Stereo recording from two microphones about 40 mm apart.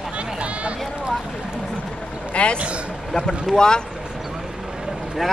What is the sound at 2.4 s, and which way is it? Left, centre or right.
Speech, left.